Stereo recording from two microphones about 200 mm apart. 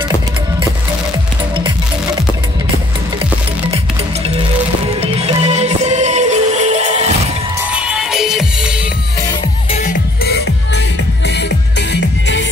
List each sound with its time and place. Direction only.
5.0 s music: 30° right (ahead or behind)
7.7 s music: 5° right (ahead or behind)
9.7 s music: 35° left (ahead or behind)
10.2 s music: 55° left (ahead or behind)
11.9 s music: 65° left (ahead or behind)